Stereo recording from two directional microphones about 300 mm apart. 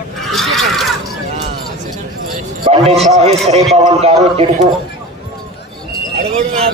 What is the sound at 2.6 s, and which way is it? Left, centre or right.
Speech, centre.